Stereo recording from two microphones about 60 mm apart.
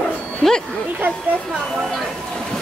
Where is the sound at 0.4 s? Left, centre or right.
Centre.